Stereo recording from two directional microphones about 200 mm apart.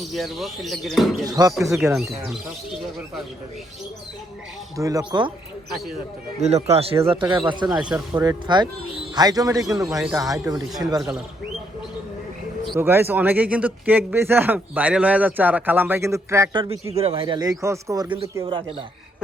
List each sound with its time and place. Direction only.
0.1 s speech: centre (ahead or behind)
1.2 s speech: 20° right (ahead or behind)
1.8 s speech: 5° right (ahead or behind)
4.8 s speech: 15° right (ahead or behind)
6.4 s speech: 30° right (ahead or behind)
7.2 s speech: 10° right (ahead or behind)
7.4 s speech: 25° right (ahead or behind)
7.9 s speech: 10° right (ahead or behind)
8.2 s speech: 20° right (ahead or behind)
12.7 s speech: 10° right (ahead or behind)